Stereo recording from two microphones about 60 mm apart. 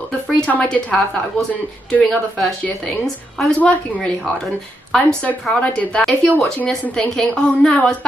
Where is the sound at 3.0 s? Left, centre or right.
Centre.